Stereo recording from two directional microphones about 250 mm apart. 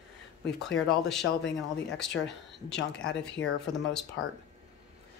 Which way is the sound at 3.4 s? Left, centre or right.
Left.